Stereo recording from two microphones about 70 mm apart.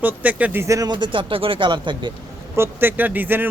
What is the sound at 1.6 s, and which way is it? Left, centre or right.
Speech, right.